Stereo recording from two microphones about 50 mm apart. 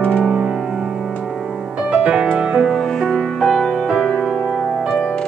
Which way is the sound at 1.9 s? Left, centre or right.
Centre.